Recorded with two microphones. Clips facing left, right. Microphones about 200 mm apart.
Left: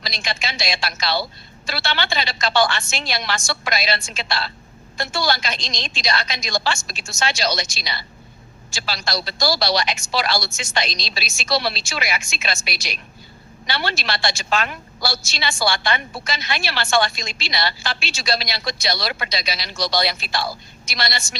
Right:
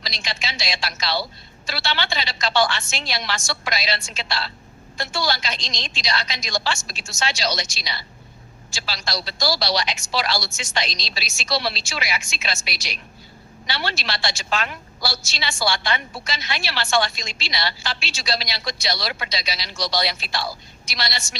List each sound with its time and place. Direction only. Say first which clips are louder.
0.0 s a woman's voice: left 3 dB; 50° left (ahead or behind)